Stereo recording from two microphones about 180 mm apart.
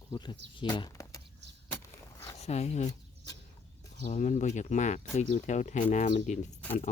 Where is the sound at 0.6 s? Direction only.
25° left (ahead or behind).